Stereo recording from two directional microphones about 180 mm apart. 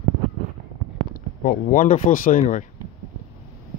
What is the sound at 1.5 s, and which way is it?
Speech, 45° left (ahead or behind).